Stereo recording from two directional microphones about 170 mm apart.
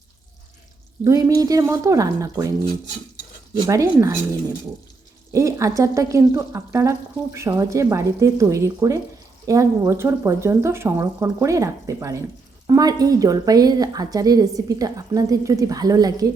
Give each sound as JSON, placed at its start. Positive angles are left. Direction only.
{"t": 1.0, "sound": "a woman's voice", "side_deg": -20}
{"t": 3.7, "sound": "speech", "side_deg": -20}
{"t": 5.3, "sound": "a woman's voice", "side_deg": -20}